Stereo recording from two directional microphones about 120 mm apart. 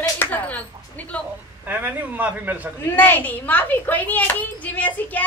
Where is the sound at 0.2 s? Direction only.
15° left (ahead or behind).